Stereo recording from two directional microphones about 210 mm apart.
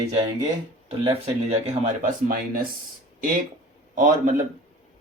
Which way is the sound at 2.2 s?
45° right (ahead or behind).